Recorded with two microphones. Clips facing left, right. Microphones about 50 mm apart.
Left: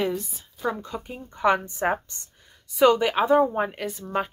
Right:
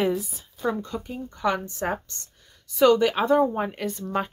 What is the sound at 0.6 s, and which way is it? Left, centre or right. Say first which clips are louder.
Speech: right 1 dB; centre.